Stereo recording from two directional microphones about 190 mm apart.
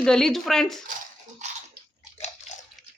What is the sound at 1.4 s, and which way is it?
Bathtub, 40° right (ahead or behind).